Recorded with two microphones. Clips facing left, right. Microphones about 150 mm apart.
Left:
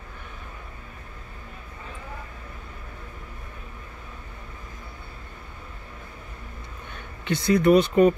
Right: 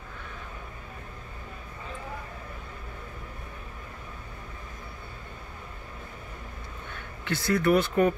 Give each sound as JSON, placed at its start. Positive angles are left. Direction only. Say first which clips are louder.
{"t": 7.2, "sound": "speech", "louder": "left 5 dB", "side_deg": 20}